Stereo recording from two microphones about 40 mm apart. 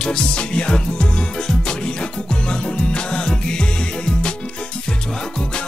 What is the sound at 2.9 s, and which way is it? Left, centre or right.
Music, left.